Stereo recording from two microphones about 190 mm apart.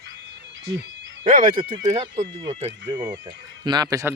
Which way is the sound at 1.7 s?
25° right (ahead or behind).